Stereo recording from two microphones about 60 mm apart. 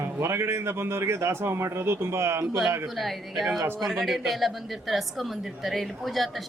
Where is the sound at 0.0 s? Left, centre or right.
Right.